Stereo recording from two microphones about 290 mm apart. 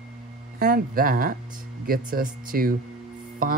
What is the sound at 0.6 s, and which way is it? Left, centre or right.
Speech, right.